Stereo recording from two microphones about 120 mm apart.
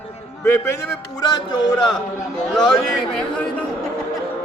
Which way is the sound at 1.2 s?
35° left (ahead or behind).